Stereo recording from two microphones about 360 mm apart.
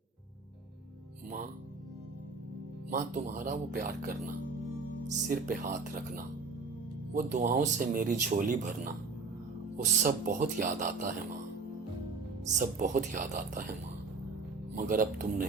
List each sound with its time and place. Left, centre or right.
2.9 s speech: right
5.3 s speech: right
12.5 s speech: centre
14.8 s speech: right